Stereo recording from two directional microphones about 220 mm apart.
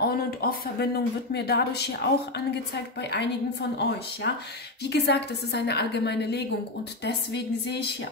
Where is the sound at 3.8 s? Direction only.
50° left (ahead or behind).